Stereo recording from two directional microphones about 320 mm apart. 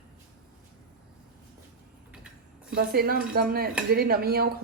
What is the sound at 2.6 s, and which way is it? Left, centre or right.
Speech, right.